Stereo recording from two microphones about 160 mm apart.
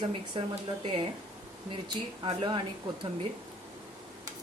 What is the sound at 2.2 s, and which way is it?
Speech, 30° right (ahead or behind).